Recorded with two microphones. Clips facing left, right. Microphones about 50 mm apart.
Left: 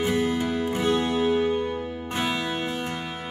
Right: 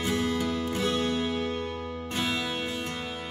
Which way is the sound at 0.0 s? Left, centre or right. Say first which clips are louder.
Left 4 dB; centre.